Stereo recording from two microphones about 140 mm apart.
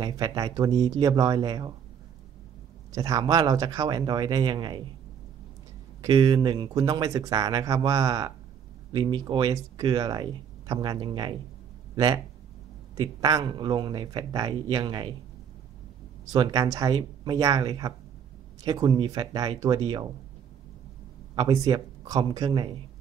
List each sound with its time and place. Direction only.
0.0 s speech: 25° right (ahead or behind)
2.9 s speech: 25° right (ahead or behind)
6.0 s speech: 30° right (ahead or behind)
16.3 s speech: 30° right (ahead or behind)
21.4 s speech: 30° right (ahead or behind)